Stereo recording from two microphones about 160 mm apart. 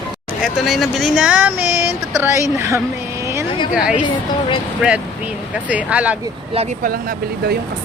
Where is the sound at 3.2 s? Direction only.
15° right (ahead or behind).